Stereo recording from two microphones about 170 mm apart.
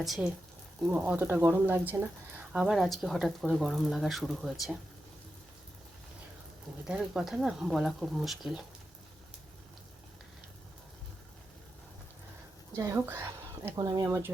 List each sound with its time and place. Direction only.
0.0 s speech: 5° right (ahead or behind)
6.8 s speech: 5° right (ahead or behind)
12.7 s speech: 15° right (ahead or behind)